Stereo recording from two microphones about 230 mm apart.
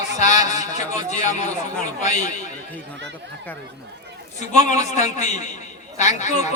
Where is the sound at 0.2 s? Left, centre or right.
Left.